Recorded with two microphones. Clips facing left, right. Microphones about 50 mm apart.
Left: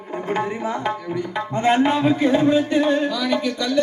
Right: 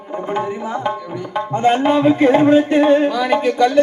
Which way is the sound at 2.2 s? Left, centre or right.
Right.